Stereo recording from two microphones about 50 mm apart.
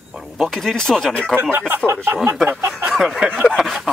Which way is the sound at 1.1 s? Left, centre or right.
Left.